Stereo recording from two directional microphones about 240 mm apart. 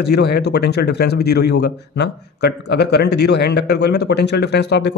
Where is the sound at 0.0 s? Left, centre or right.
Left.